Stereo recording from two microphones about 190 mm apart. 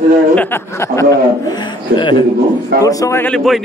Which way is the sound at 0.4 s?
10° left (ahead or behind).